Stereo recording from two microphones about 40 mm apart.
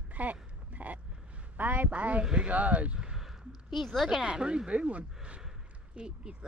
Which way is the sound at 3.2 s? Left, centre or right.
Centre.